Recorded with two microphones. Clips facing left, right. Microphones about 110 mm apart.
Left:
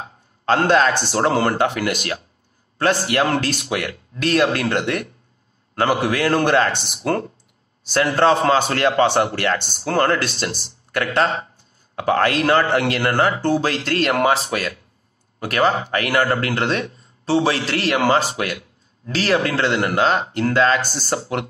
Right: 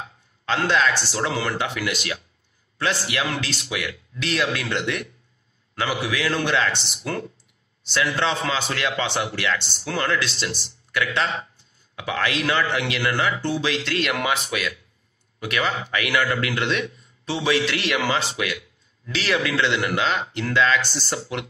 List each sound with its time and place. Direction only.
0.0 s a man's voice: 45° left (ahead or behind)